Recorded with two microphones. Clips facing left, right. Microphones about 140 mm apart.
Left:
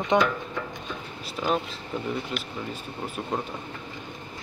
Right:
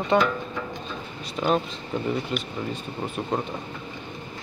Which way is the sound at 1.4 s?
Centre (ahead or behind).